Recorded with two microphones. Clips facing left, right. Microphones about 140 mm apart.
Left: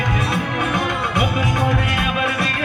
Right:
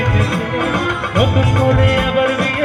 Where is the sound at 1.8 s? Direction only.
60° right (ahead or behind).